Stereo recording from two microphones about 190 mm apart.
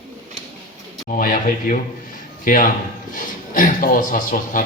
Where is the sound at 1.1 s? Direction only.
45° left (ahead or behind).